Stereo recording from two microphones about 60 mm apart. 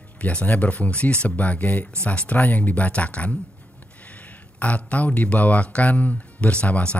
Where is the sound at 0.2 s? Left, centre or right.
Left.